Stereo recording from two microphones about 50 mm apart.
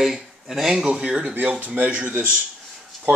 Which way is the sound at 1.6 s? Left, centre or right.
Right.